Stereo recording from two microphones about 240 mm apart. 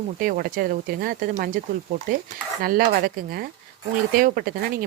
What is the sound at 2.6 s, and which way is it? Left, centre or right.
Speech, right.